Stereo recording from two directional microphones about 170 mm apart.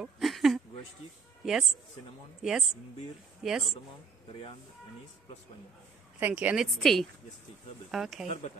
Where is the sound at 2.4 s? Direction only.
Centre (ahead or behind).